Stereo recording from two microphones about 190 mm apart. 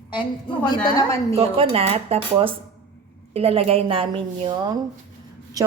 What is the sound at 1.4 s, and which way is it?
A woman's voice, 30° right (ahead or behind).